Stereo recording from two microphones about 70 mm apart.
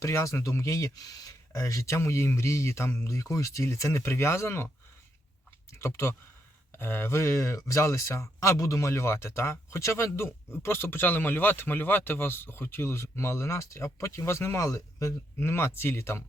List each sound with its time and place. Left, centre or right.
0.0 s speech: left
5.7 s speech: left
15.4 s speech: left